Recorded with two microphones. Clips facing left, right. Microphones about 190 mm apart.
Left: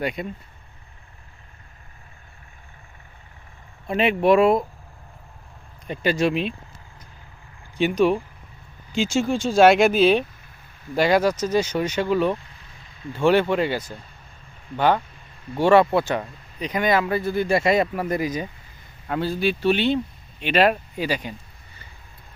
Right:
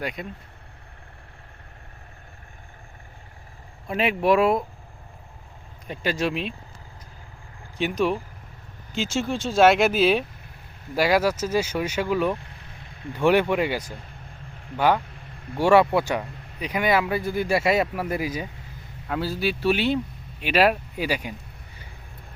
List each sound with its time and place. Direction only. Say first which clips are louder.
0.0 s speech: left 4 dB; centre (ahead or behind)
3.8 s speech: left 3 dB; 5° right (ahead or behind)
5.9 s speech: left 4 dB; centre (ahead or behind)
7.8 s speech: left 4 dB; centre (ahead or behind)